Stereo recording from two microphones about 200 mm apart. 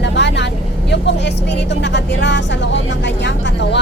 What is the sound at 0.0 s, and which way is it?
Vehicle, 60° left (ahead or behind).